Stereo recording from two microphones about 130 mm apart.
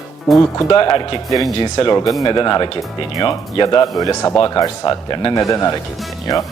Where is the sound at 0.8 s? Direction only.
40° left (ahead or behind).